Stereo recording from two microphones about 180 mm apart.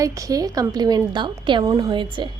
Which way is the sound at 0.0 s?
20° right (ahead or behind).